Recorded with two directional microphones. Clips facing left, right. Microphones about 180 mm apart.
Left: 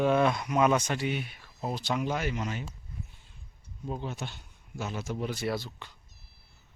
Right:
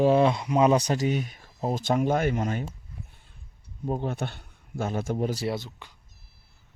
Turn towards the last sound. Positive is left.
turn(degrees=-15)  # may be behind; listen again after turning